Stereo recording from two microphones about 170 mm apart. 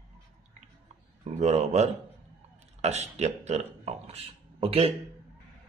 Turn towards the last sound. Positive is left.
turn(degrees=-35)  # may be behind; listen again after turning